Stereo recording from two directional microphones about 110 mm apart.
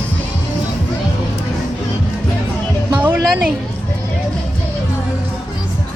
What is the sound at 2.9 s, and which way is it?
Music, 45° right (ahead or behind).